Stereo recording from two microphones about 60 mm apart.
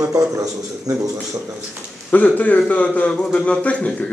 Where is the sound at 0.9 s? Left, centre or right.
Right.